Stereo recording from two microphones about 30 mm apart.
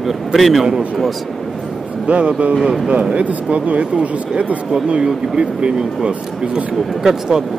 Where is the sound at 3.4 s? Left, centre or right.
Right.